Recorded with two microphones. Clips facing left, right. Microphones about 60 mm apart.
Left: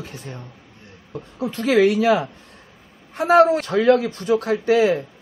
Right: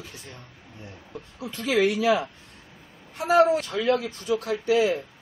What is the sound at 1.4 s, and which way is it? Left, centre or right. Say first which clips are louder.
Speech: left 6 dB; left.